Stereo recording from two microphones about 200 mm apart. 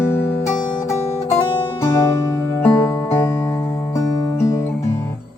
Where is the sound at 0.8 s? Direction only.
15° left (ahead or behind).